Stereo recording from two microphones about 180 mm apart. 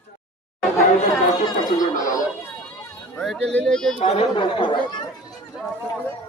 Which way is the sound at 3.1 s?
5° left (ahead or behind).